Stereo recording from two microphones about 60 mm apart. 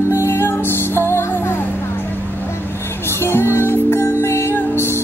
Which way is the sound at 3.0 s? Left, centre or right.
Left.